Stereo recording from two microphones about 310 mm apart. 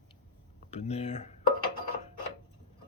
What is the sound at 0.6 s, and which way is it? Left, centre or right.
Speech, left.